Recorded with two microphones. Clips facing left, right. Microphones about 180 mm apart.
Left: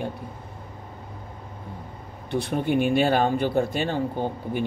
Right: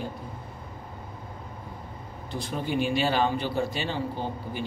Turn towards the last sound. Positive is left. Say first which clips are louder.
# left 5 dB
turn(degrees=50)  # may be behind; listen again after turning